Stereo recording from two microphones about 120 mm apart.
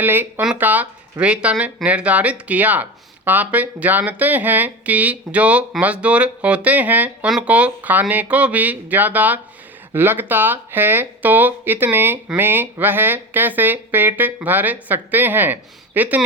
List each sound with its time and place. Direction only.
0.0 s speech: 15° right (ahead or behind)